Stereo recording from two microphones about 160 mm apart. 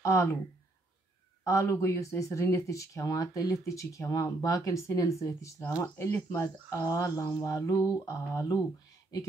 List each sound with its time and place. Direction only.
0.0 s speech: 15° left (ahead or behind)
1.4 s speech: 20° left (ahead or behind)